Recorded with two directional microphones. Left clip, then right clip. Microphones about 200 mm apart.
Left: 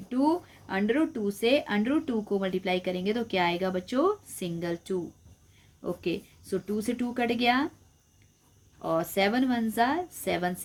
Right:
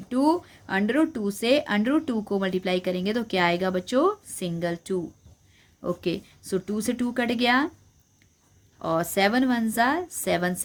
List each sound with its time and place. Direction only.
0.1 s speech: 35° right (ahead or behind)
8.8 s speech: 35° right (ahead or behind)